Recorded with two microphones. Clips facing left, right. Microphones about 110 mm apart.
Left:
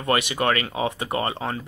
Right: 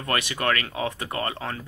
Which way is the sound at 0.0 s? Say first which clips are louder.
Left 4 dB; 15° left (ahead or behind).